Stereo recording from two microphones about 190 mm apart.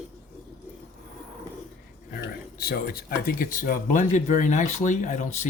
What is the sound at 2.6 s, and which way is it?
Speech, 50° left (ahead or behind).